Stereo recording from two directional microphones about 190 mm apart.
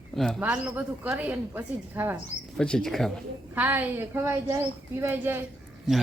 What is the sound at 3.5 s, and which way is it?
A woman's voice, 10° right (ahead or behind).